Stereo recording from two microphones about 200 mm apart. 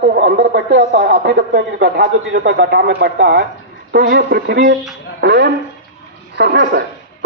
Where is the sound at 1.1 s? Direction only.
45° right (ahead or behind).